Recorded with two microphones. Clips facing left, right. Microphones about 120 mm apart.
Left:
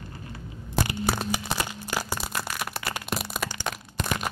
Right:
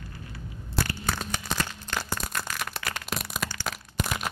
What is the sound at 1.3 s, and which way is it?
Crack, 10° left (ahead or behind).